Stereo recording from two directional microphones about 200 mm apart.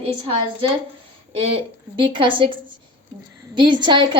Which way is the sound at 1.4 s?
25° right (ahead or behind).